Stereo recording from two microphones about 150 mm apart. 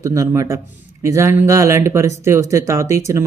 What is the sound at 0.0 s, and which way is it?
Speech, 20° right (ahead or behind).